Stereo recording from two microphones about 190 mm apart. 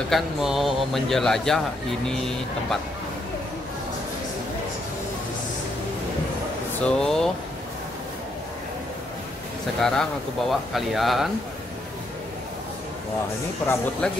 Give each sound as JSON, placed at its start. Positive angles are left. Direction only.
{"t": 0.1, "sound": "a man's voice", "side_deg": 0}
{"t": 6.8, "sound": "a man's voice", "side_deg": 5}
{"t": 9.8, "sound": "a man's voice", "side_deg": 0}
{"t": 14.0, "sound": "a man's voice", "side_deg": 5}